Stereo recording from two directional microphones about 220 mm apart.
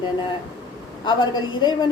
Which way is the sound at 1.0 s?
20° left (ahead or behind).